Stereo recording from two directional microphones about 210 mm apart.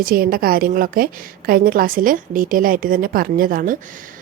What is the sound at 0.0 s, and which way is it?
A woman's voice, 45° right (ahead or behind).